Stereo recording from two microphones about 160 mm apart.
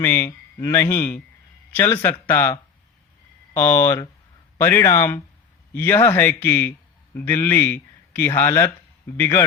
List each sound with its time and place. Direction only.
0.0 s a man's voice: 15° left (ahead or behind)